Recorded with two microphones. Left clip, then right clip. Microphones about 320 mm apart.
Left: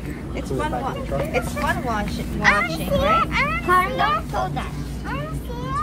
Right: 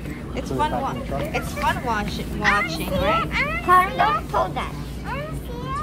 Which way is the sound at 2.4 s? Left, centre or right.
Centre.